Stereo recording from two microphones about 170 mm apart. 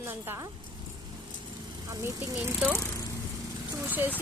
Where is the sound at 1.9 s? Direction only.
15° right (ahead or behind).